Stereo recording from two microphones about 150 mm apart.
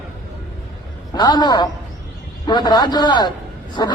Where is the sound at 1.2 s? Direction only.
30° left (ahead or behind).